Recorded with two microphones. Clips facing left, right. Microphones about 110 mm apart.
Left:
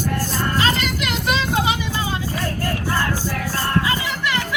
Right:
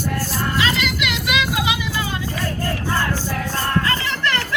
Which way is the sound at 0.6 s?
40° left (ahead or behind).